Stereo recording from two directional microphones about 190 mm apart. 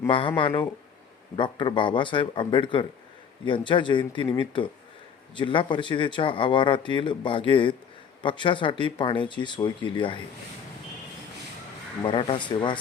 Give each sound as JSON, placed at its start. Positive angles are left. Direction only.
{"t": 0.1, "sound": "speech", "side_deg": 25}
{"t": 12.0, "sound": "speech", "side_deg": 25}